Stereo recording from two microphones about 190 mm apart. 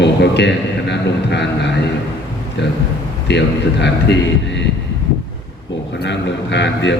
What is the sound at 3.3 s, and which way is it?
Speech, 65° left (ahead or behind).